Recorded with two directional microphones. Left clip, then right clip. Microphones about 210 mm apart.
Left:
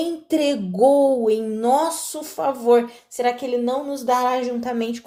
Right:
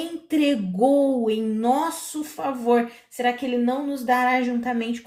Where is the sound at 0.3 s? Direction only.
40° left (ahead or behind).